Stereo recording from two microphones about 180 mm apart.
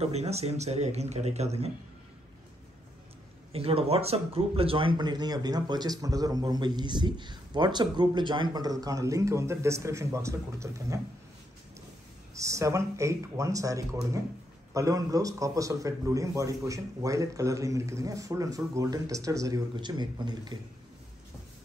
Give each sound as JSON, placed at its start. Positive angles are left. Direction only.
{"t": 0.0, "sound": "a man's voice", "side_deg": -35}
{"t": 3.5, "sound": "speech", "side_deg": -35}
{"t": 12.4, "sound": "a man's voice", "side_deg": -15}